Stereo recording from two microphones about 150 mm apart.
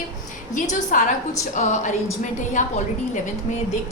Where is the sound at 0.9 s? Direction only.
60° left (ahead or behind).